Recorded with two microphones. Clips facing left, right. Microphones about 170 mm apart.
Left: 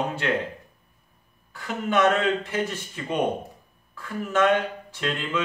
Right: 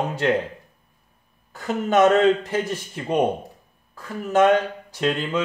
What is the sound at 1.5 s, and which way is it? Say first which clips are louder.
Speech: right 5 dB; 40° right (ahead or behind).